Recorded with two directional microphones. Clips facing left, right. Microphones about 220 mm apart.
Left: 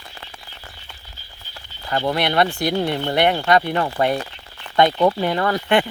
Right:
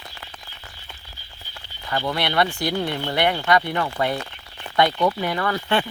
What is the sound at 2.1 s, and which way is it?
Speech, 25° left (ahead or behind).